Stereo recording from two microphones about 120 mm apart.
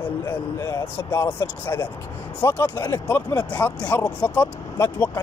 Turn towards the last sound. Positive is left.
turn(degrees=20)  # may be behind; listen again after turning